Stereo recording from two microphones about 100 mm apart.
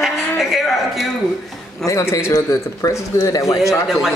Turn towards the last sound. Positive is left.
turn(degrees=-5)  # may be behind; listen again after turning